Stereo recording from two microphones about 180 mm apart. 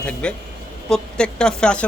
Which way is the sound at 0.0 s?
5° left (ahead or behind).